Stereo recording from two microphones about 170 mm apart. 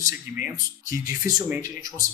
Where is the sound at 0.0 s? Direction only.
20° right (ahead or behind).